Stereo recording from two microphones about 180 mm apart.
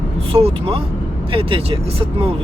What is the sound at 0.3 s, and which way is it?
Speech, 35° right (ahead or behind).